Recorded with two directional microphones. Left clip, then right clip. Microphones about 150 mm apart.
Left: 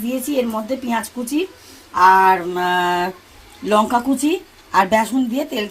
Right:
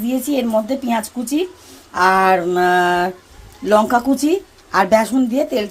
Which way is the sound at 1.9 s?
65° right (ahead or behind).